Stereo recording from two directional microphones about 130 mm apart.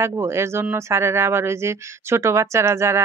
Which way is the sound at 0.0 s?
20° right (ahead or behind).